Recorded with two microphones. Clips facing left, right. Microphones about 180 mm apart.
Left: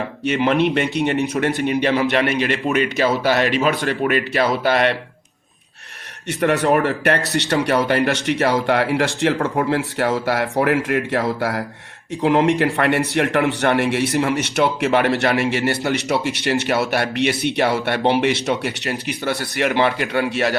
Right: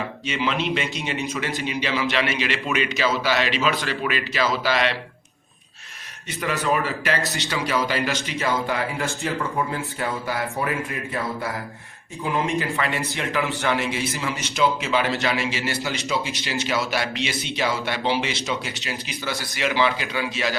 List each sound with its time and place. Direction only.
0.3 s a man's voice: 55° left (ahead or behind)
6.4 s a man's voice: 70° left (ahead or behind)